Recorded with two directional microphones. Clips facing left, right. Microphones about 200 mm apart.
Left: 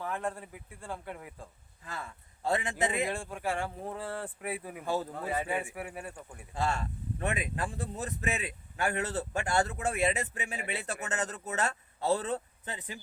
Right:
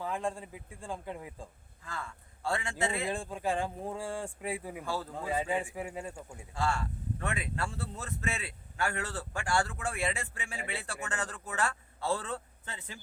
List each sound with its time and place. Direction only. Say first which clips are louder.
0.0 s speech: right 1 dB; 15° right (ahead or behind)
1.8 s speech: even; 20° left (ahead or behind)
3.1 s speech: right 1 dB; 15° right (ahead or behind)
4.9 s speech: left 5 dB; 20° left (ahead or behind)
5.1 s speech: right 1 dB; 15° right (ahead or behind)
6.5 s speech: left 1 dB; 20° left (ahead or behind)